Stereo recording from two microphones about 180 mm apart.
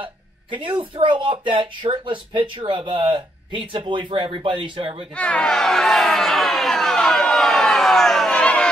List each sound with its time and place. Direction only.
0.0 s speech: 25° right (ahead or behind)
5.1 s speech: 5° left (ahead or behind)